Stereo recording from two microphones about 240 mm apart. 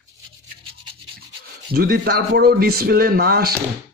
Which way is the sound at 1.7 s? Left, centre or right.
Right.